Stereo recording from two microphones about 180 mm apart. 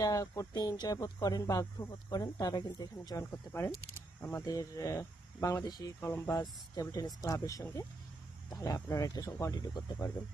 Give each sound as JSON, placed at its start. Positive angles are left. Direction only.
{"t": 0.0, "sound": "speech", "side_deg": 20}